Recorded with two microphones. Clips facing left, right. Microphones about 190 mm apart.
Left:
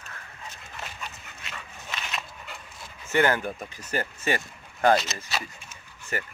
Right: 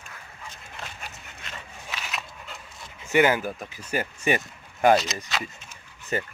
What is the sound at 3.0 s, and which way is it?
Speech, 15° right (ahead or behind).